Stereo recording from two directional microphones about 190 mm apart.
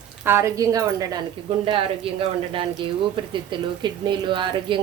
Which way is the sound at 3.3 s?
25° right (ahead or behind).